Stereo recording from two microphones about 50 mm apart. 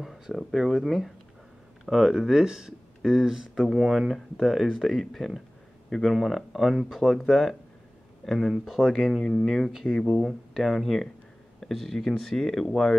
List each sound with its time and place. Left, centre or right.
0.0 s speech: centre